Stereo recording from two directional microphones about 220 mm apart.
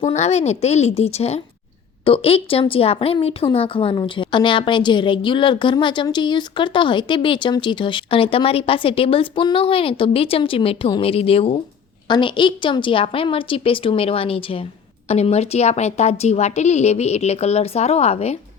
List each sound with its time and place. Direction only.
0.0 s a woman's voice: 30° left (ahead or behind)